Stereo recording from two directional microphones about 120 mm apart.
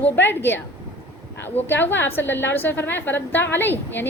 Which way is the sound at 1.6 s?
15° left (ahead or behind).